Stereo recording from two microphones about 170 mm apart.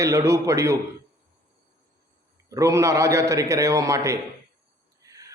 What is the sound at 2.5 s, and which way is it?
A man's voice, 20° right (ahead or behind).